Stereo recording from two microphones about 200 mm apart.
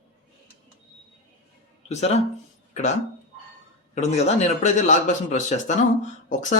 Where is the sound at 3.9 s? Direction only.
35° left (ahead or behind).